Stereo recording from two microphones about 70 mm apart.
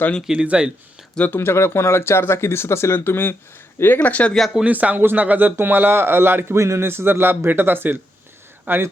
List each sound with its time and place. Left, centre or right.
0.3 s speech: centre
1.1 s speech: left
1.4 s speech: left; by 4.4 s centre
4.7 s speech: right